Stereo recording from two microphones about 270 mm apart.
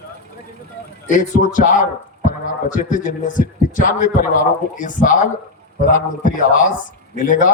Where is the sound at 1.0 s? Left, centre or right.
Left.